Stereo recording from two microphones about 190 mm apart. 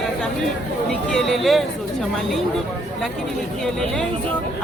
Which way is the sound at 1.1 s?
Centre (ahead or behind).